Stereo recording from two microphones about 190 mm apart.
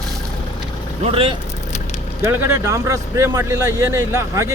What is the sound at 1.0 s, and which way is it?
Speech, 30° right (ahead or behind).